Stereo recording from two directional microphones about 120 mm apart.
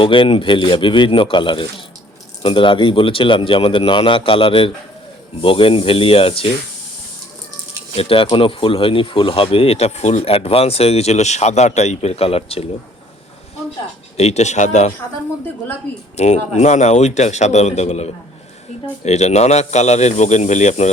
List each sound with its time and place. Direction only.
0.0 s speech: 45° left (ahead or behind)
7.9 s speech: 50° left (ahead or behind)
14.2 s a man's voice: 65° left (ahead or behind)
16.1 s a man's voice: 65° left (ahead or behind)